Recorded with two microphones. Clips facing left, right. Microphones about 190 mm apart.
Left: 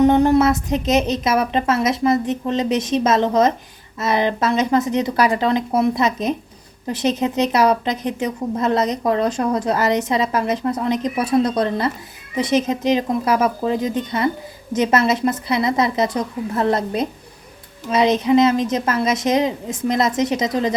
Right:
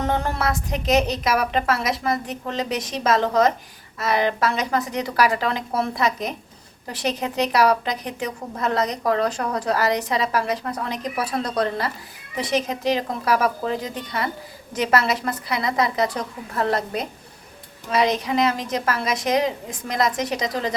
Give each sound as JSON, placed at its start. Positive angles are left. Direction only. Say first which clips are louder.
{"t": 0.0, "sound": "a woman's voice", "louder": "left 10 dB", "side_deg": 20}